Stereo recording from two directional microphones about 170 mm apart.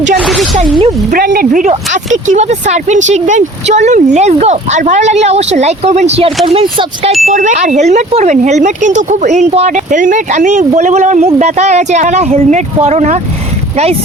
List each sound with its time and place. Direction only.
0.2 s zipper: centre (ahead or behind)
1.1 s speech: 60° right (ahead or behind)
2.2 s speech: 45° right (ahead or behind)
7.3 s speech: 45° right (ahead or behind)